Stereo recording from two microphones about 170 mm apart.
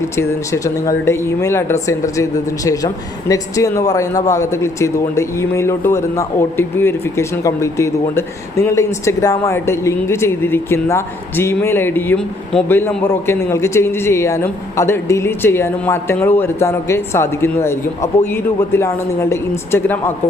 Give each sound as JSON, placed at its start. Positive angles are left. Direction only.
{"t": 0.2, "sound": "speech", "side_deg": 15}